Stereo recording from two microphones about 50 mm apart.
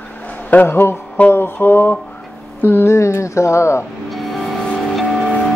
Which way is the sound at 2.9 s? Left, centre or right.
Left.